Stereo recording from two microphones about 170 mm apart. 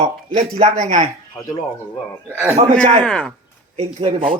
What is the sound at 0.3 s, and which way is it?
Speech, 40° right (ahead or behind).